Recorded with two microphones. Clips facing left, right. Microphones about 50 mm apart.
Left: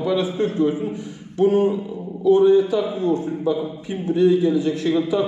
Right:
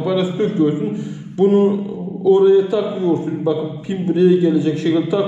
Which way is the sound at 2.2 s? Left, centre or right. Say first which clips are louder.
Right 3 dB; right.